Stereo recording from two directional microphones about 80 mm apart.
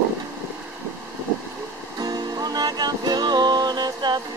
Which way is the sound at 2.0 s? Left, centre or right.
Right.